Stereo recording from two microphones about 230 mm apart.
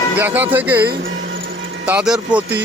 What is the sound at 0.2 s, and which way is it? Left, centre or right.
Speech, centre.